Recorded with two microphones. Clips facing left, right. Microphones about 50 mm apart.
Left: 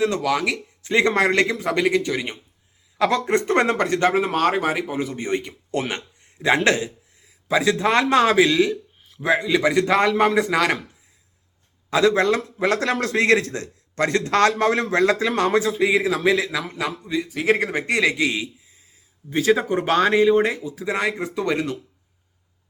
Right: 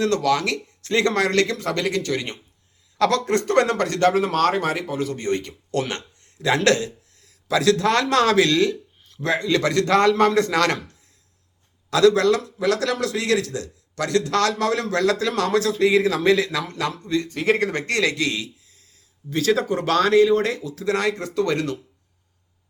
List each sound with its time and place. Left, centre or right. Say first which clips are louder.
0.0 s speech: right 1 dB; centre
11.9 s speech: right 2 dB; left